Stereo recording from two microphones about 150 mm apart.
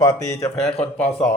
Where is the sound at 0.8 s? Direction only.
10° left (ahead or behind).